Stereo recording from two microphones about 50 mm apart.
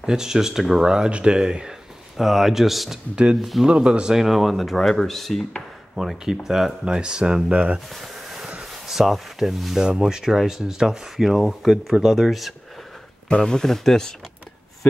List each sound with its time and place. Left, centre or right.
0.0 s speech: centre
2.1 s speech: centre
3.6 s speech: right
4.2 s speech: centre; by 7.8 s right
7.9 s a sound: centre
8.8 s speech: centre
13.3 s speech: centre